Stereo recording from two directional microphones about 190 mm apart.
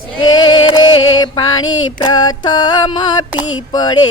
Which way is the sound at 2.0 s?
20° left (ahead or behind).